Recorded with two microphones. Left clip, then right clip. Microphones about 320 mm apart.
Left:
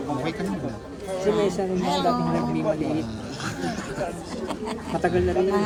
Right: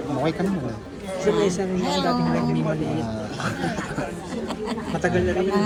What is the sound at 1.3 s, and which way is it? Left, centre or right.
Speech, centre.